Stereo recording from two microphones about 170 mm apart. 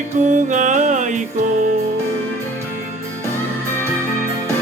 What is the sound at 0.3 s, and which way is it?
Music, 45° right (ahead or behind).